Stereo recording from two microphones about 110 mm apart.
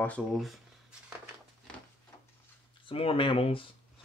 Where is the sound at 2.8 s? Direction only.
55° left (ahead or behind).